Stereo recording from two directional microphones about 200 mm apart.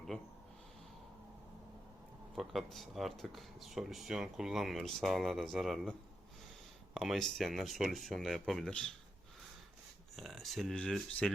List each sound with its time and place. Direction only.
2.3 s speech: centre (ahead or behind)
10.2 s speech: centre (ahead or behind)